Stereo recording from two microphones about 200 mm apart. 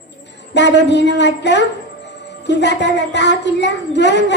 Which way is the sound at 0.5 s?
60° left (ahead or behind).